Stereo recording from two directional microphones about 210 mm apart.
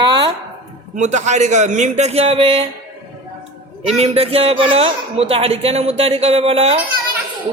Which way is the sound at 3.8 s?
30° right (ahead or behind).